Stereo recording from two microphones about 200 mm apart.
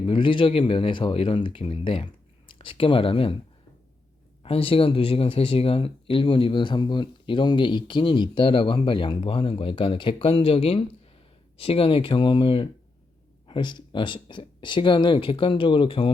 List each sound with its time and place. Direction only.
0.0 s speech: 25° left (ahead or behind)
4.4 s speech: 30° left (ahead or behind)